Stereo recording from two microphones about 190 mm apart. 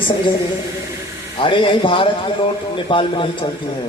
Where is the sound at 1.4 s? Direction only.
25° left (ahead or behind).